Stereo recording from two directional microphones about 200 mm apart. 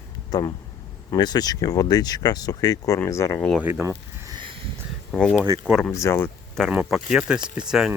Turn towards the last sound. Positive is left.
turn(degrees=-5)  # may be behind; listen again after turning